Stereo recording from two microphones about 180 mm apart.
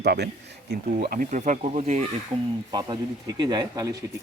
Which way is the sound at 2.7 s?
20° right (ahead or behind).